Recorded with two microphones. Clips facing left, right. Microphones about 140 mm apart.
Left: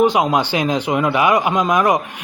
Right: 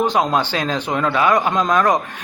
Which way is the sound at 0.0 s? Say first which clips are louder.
Left 3 dB; 10° left (ahead or behind).